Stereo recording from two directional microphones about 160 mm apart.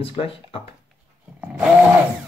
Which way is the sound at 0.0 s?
35° left (ahead or behind).